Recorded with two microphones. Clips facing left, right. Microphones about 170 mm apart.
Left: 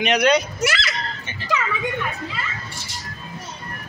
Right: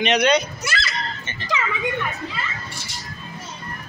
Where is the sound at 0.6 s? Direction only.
85° left.